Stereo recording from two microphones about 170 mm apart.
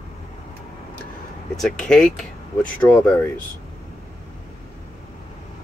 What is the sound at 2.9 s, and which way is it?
Speech, 20° left (ahead or behind).